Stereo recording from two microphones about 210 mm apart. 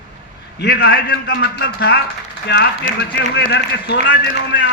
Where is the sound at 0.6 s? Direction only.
50° left (ahead or behind).